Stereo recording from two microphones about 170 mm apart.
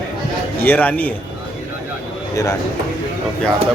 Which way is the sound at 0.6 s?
10° left (ahead or behind).